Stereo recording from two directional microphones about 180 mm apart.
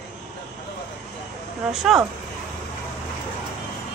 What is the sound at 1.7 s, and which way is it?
Speech, centre (ahead or behind).